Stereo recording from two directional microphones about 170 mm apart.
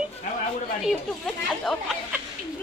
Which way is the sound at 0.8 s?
Centre (ahead or behind).